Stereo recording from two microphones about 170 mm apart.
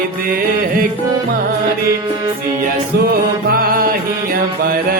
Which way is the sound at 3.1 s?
60° right (ahead or behind).